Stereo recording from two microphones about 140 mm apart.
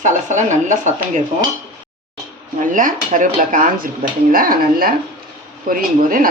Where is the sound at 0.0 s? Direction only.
60° right (ahead or behind).